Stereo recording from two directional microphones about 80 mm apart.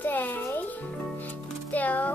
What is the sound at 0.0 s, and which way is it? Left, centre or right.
Music, left.